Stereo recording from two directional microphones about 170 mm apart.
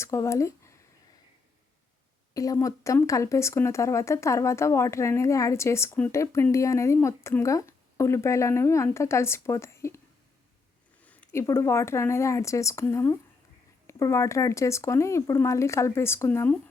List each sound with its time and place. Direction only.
0.0 s speech: 15° left (ahead or behind)
2.3 s speech: 20° left (ahead or behind)
11.0 s speech: 10° left (ahead or behind)